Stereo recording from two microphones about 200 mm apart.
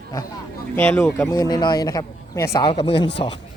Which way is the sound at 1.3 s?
20° left (ahead or behind).